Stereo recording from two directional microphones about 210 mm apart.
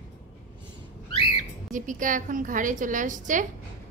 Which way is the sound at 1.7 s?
40° right (ahead or behind).